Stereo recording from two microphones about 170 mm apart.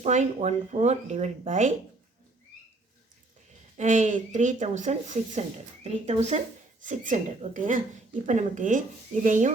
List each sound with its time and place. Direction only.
0.0 s speech: 45° right (ahead or behind)
3.8 s speech: 45° right (ahead or behind)